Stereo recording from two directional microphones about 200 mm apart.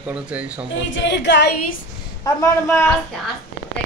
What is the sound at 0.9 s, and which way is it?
Speech, 60° left (ahead or behind).